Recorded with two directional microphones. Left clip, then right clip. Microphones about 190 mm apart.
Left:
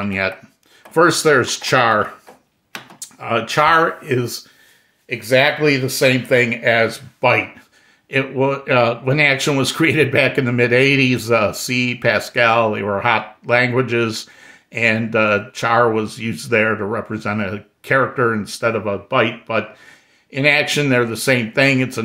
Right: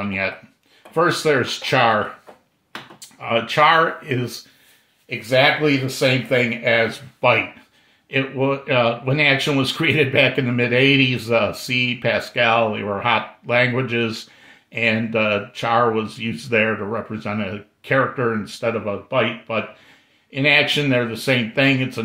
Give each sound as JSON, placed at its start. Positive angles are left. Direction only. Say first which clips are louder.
{"t": 0.9, "sound": "speech", "louder": "left 4 dB", "side_deg": 45}
{"t": 3.0, "sound": "speech", "louder": "left 1 dB", "side_deg": 40}
{"t": 5.1, "sound": "speech", "louder": "left 1 dB", "side_deg": 50}